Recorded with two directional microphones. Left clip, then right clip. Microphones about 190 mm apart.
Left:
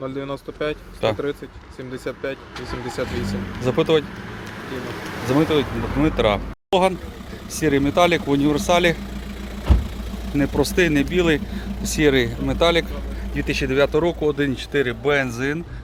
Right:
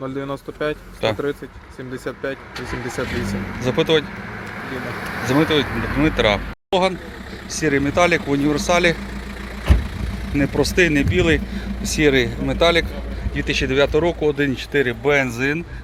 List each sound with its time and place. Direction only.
0.0 s speech: 25° right (ahead or behind)
1.0 s speech: 10° left (ahead or behind)
3.6 s speech: 10° left (ahead or behind)
4.9 s speech: 55° left (ahead or behind)
5.2 s speech: 10° left (ahead or behind)
10.3 s speech: 5° left (ahead or behind); by 15.5 s 10° right (ahead or behind)